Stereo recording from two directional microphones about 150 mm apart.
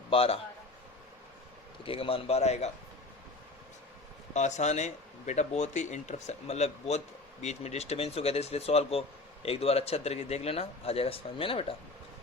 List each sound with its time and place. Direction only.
0.1 s a man's voice: 40° left (ahead or behind)
1.8 s a man's voice: 40° left (ahead or behind)
4.4 s speech: 50° left (ahead or behind)